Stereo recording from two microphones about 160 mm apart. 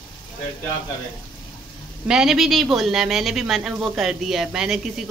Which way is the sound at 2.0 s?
5° right (ahead or behind).